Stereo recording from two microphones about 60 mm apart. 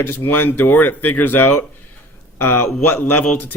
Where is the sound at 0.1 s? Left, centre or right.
Left.